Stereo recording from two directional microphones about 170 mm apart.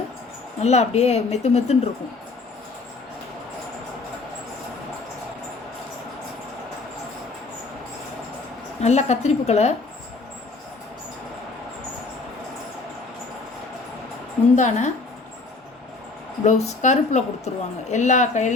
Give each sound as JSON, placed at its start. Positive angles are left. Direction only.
{"t": 0.6, "sound": "a woman's voice", "side_deg": 40}
{"t": 8.8, "sound": "a woman's voice", "side_deg": 40}
{"t": 14.5, "sound": "a woman's voice", "side_deg": 45}
{"t": 16.4, "sound": "a woman's voice", "side_deg": 45}